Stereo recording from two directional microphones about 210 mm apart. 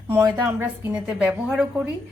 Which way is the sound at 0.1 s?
10° right (ahead or behind).